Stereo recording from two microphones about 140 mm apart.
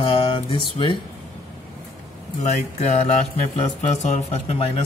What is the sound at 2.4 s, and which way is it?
Speech, 55° left (ahead or behind).